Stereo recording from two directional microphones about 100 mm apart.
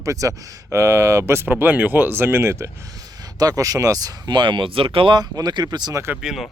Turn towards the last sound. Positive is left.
turn(degrees=-5)  # may be behind; listen again after turning